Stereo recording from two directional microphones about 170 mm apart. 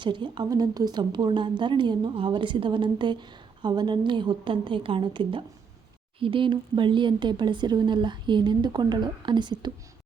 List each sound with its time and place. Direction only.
0.0 s a woman's voice: 30° right (ahead or behind)